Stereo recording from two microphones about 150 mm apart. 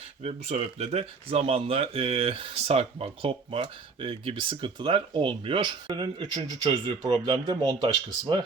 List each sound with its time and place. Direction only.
0.2 s speech: 45° right (ahead or behind)